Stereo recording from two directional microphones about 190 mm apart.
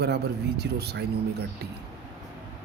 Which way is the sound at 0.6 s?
60° right (ahead or behind).